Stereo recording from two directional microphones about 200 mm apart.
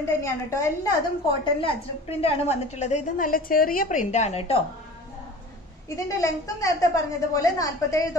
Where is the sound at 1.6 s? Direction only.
30° left (ahead or behind).